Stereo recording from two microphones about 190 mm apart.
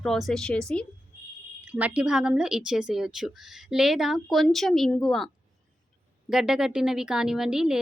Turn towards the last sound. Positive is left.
turn(degrees=-5)  # may be behind; listen again after turning